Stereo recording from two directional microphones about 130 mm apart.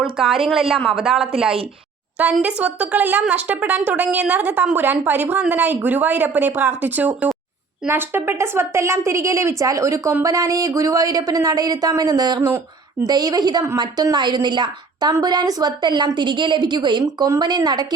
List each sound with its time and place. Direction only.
0.0 s speech: centre (ahead or behind)
2.4 s a woman's voice: 10° right (ahead or behind); by 17.8 s 35° right (ahead or behind)